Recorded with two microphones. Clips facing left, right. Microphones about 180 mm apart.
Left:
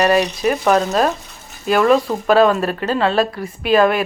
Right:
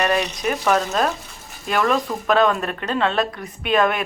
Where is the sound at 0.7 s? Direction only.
35° left (ahead or behind).